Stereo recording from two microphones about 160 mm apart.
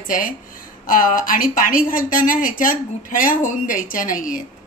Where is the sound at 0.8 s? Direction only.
55° left (ahead or behind).